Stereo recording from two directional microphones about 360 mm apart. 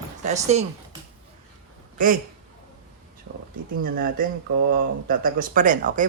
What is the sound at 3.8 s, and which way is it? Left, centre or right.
Speech, right.